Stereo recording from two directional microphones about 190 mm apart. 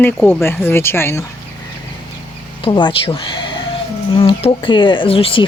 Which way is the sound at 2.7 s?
25° left (ahead or behind).